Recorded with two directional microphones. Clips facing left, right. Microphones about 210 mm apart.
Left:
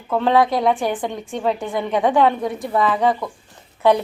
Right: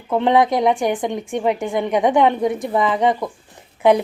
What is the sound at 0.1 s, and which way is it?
A woman's voice, 20° right (ahead or behind).